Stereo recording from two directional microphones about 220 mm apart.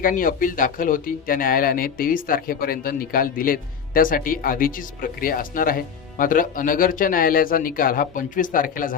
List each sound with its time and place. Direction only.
0.0 s speech: 40° left (ahead or behind)